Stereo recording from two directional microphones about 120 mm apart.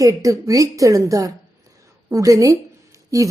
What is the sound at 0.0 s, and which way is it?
A woman's voice, 30° right (ahead or behind).